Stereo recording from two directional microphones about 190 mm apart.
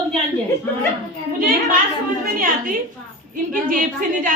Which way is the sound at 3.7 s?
45° right (ahead or behind).